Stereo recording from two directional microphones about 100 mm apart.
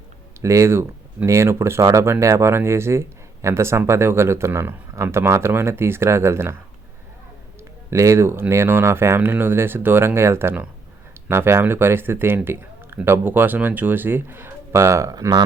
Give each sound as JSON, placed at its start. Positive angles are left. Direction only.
{"t": 0.4, "sound": "a man's voice", "side_deg": -30}
{"t": 7.9, "sound": "a man's voice", "side_deg": -30}